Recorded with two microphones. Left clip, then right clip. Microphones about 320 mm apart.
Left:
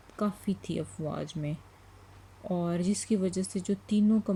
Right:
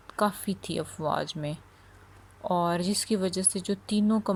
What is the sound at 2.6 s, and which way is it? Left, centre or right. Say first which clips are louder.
Speech: right 5 dB; centre.